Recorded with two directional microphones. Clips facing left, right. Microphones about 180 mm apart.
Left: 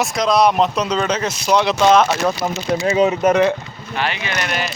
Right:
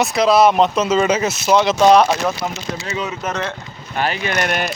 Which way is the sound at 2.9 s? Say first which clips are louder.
Left 12 dB; 35° left (ahead or behind).